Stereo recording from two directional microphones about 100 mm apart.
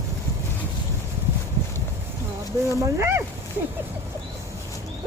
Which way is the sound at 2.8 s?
30° right (ahead or behind).